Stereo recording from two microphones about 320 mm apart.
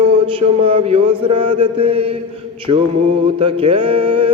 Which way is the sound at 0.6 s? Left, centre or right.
Centre.